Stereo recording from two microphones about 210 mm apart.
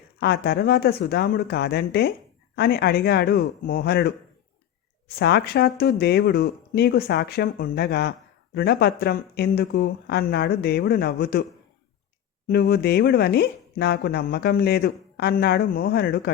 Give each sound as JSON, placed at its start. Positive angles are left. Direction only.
{"t": 0.2, "sound": "speech", "side_deg": 50}
{"t": 12.5, "sound": "speech", "side_deg": 50}